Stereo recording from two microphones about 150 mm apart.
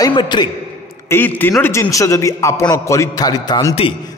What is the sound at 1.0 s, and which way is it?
A man's voice, 15° left (ahead or behind).